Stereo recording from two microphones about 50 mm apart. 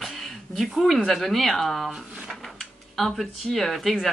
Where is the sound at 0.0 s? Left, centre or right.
Centre.